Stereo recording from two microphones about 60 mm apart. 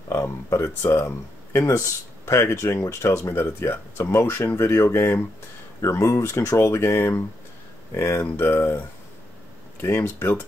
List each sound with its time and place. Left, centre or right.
0.1 s speech: left
5.8 s speech: left